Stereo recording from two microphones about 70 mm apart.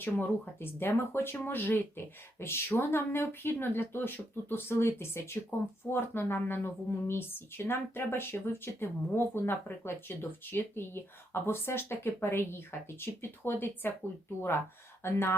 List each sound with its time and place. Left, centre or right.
0.0 s speech: left
15.0 s speech: left